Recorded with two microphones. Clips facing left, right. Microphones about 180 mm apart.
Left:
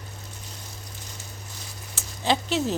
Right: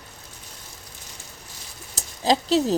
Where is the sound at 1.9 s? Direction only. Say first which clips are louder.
Right 3 dB; 35° right (ahead or behind).